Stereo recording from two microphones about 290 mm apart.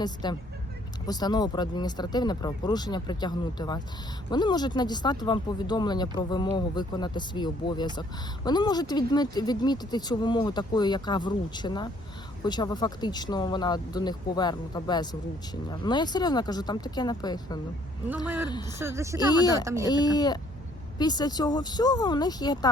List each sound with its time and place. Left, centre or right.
0.0 s speech: centre
18.8 s speech: centre
19.3 s speech: centre
19.6 s speech: centre
19.9 s speech: centre